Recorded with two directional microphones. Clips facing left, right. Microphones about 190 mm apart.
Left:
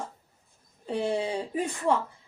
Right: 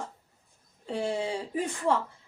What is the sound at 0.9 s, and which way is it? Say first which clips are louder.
Speech: left 2 dB; 20° left (ahead or behind).